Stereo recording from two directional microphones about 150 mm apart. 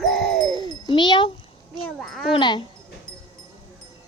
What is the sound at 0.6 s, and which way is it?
Speech, 30° left (ahead or behind).